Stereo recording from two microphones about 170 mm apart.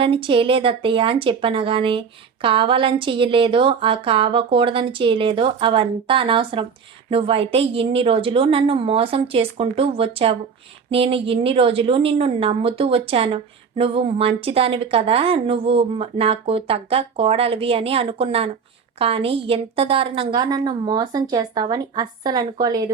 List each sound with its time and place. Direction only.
0.0 s a woman's voice: 30° right (ahead or behind)